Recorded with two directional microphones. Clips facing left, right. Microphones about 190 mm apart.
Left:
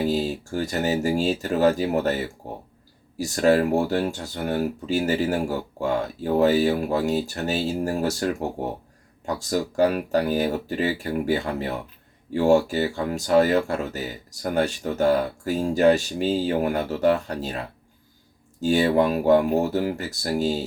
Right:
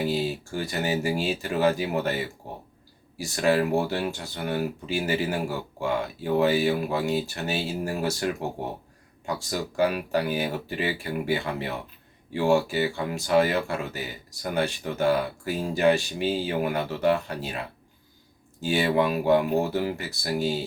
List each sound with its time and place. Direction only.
0.0 s speech: 40° left (ahead or behind)